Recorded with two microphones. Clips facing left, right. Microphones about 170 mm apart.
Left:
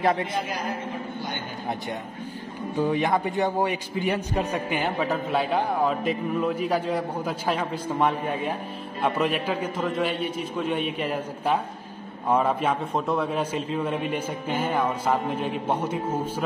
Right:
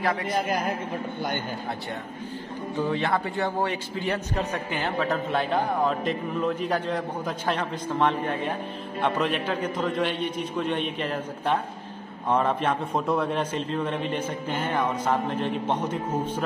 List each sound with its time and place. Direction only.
0.3 s a man's voice: 50° right (ahead or behind)
2.8 s a man's voice: 15° left (ahead or behind)